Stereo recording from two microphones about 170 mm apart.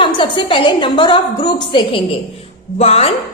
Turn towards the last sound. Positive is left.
turn(degrees=35)  # may be behind; listen again after turning